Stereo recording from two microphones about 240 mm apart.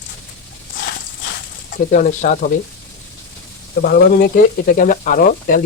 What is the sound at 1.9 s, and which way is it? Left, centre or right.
Speech, left.